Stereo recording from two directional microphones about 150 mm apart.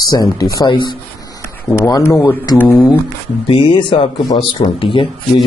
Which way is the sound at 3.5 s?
30° left (ahead or behind).